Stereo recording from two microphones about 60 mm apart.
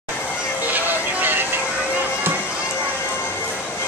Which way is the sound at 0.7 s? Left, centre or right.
Right.